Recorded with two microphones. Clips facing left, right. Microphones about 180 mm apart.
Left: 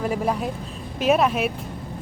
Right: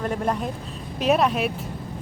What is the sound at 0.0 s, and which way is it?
Speech, 5° left (ahead or behind).